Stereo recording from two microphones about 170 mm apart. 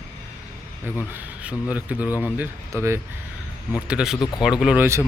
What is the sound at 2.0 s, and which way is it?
Speech, 20° left (ahead or behind).